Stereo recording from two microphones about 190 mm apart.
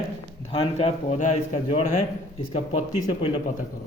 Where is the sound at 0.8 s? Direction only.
35° left (ahead or behind).